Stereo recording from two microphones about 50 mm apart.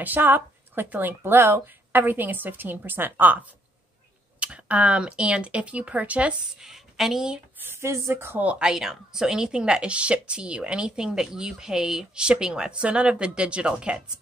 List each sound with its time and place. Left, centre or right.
0.0 s speech: right
6.6 s a woman's voice: centre
7.5 s a sound: right
7.8 s speech: right
8.5 s a woman's voice: centre